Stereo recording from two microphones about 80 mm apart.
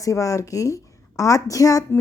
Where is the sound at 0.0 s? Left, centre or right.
Left.